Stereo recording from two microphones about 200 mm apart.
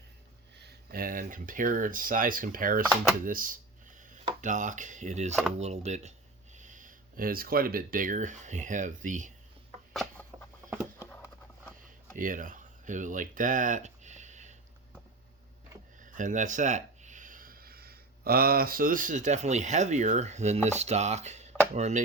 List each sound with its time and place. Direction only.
0.5 s speech: 50° right (ahead or behind)
3.2 s a sound: 45° right (ahead or behind)
5.5 s speech: 35° right (ahead or behind)
9.9 s a sound: centre (ahead or behind)
12.1 s speech: 40° right (ahead or behind)
16.0 s speech: 40° right (ahead or behind)